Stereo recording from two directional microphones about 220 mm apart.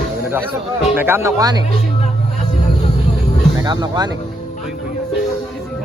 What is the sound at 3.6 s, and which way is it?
Speech, 20° right (ahead or behind).